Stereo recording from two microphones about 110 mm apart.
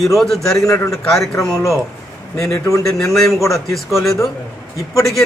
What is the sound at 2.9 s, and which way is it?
Speech, 5° left (ahead or behind).